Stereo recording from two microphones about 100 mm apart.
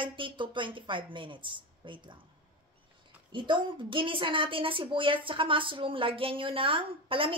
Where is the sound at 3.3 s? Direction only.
55° right (ahead or behind).